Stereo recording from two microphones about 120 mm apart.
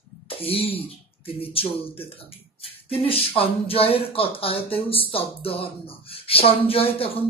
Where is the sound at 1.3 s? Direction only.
50° left (ahead or behind).